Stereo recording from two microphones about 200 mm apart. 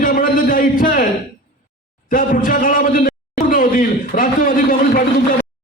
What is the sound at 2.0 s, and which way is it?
A man's voice, 45° left (ahead or behind).